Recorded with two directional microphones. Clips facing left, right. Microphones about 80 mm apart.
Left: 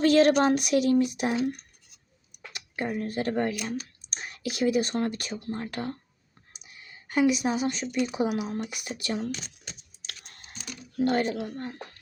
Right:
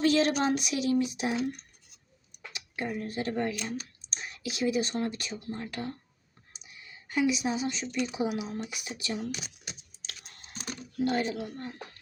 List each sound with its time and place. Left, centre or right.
0.0 s speech: left
2.5 s speech: left
6.5 s a sound: left
7.9 s speech: left
9.3 s speech: centre
10.1 s computer keyboard: left
10.5 s typing: right
10.9 s speech: left